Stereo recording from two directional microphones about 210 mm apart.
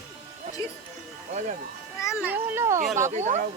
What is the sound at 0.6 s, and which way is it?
Music, 15° left (ahead or behind).